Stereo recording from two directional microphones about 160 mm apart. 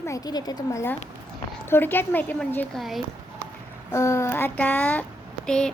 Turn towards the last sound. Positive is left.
turn(degrees=5)  # may be behind; listen again after turning